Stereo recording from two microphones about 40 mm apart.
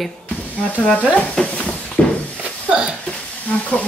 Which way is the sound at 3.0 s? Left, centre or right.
Left.